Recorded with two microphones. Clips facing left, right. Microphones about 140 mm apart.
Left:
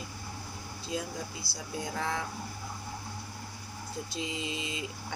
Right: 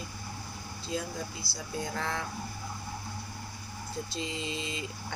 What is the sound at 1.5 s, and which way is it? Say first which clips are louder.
Speech: right 1 dB; 45° left (ahead or behind).